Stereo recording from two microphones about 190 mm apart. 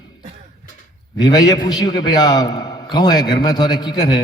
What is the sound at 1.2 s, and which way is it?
A man's voice, 20° left (ahead or behind).